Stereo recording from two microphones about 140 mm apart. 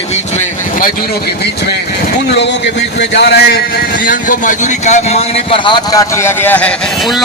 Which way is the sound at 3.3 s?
90° left.